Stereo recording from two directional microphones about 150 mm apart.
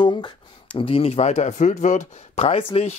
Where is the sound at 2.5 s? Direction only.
40° left (ahead or behind).